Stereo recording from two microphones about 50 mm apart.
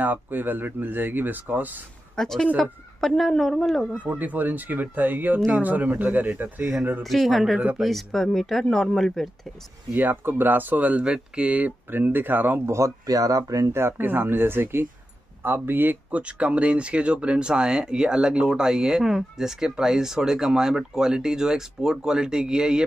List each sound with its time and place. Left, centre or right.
0.0 s speech: right
2.1 s speech: centre
4.0 s speech: right
7.0 s speech: centre
9.9 s speech: right
11.9 s speech: right
12.6 s speech: right
13.6 s speech: right
16.1 s speech: right